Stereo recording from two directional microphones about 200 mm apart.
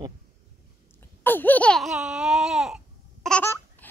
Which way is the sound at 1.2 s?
10° left (ahead or behind).